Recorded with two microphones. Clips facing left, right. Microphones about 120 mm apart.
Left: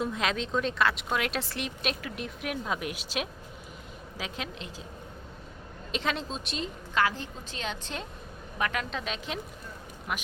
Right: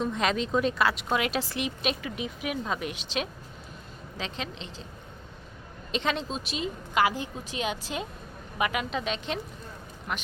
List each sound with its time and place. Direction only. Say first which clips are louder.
0.0 s a woman's voice: right 3 dB; centre (ahead or behind)
5.9 s a woman's voice: right 2 dB; centre (ahead or behind)